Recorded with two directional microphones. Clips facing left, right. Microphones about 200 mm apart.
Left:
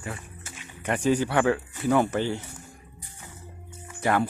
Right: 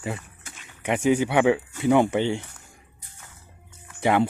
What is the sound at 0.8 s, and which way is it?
Speech, 10° right (ahead or behind).